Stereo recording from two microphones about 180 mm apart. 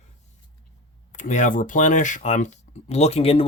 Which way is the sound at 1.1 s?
40° left (ahead or behind).